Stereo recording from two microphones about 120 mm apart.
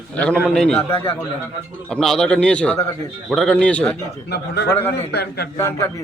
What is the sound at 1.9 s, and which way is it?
A man's voice, 5° left (ahead or behind).